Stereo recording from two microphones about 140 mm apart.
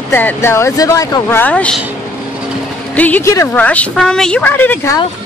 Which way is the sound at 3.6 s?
10° left (ahead or behind).